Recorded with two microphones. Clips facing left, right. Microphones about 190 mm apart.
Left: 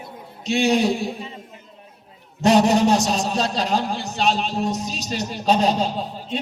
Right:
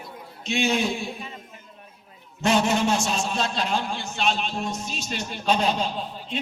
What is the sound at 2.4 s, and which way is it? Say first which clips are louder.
A man's voice: left 6 dB; 35° left (ahead or behind).